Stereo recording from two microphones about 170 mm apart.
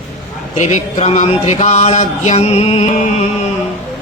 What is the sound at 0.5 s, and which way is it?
Speech, 45° left (ahead or behind).